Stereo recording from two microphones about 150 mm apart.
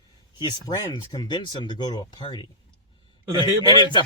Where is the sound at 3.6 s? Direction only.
30° left (ahead or behind).